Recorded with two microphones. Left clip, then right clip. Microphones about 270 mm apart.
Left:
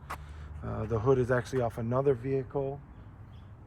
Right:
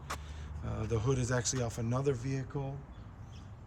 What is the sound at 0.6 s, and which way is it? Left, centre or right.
Speech, left.